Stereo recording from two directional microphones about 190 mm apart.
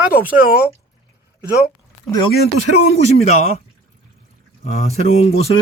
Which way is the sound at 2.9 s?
35° left (ahead or behind).